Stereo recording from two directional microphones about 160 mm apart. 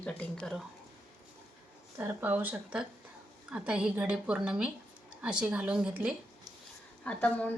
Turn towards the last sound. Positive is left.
turn(degrees=10)  # may be behind; listen again after turning